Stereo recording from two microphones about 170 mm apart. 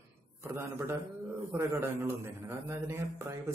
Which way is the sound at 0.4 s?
15° right (ahead or behind).